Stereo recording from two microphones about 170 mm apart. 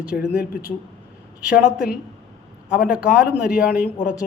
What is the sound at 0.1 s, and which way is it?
Speech, 60° left (ahead or behind).